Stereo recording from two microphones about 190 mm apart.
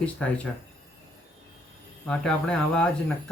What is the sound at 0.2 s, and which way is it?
Speech, 5° left (ahead or behind).